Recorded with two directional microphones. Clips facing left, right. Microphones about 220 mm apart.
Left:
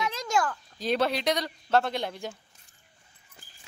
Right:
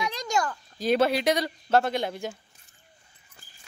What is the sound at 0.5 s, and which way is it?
Speech, 5° right (ahead or behind).